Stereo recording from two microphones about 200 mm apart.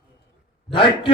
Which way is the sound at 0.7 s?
25° left (ahead or behind).